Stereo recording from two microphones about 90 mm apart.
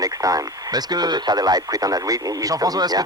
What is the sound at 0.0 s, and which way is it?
Speech, 40° right (ahead or behind).